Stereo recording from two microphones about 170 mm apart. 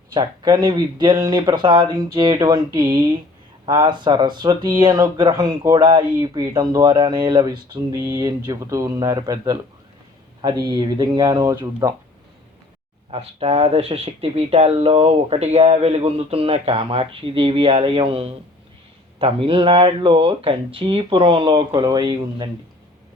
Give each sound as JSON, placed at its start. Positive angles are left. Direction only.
{"t": 0.1, "sound": "speech", "side_deg": -25}
{"t": 13.1, "sound": "speech", "side_deg": -35}